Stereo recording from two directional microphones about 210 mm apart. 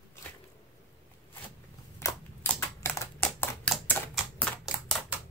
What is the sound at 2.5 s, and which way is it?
Typing, 15° left (ahead or behind).